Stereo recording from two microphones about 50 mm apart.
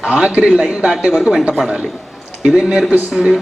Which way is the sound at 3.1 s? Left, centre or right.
Centre.